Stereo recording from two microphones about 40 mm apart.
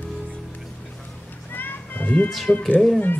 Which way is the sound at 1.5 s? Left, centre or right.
Left.